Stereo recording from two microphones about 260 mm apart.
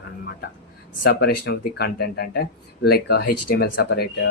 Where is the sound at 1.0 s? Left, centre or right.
Left.